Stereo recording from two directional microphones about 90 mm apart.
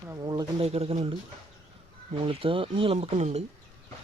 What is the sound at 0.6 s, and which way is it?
Speech, 90° right.